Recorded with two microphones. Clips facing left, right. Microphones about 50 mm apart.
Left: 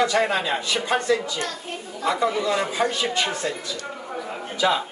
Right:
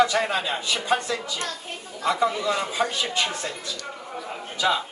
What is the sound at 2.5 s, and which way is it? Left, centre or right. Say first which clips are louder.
Speech: left 2 dB; centre.